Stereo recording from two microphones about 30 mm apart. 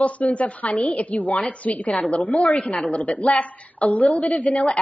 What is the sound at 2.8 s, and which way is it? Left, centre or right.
A woman's voice, left.